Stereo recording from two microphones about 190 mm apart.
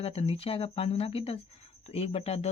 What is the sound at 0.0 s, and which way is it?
Speech, 35° left (ahead or behind).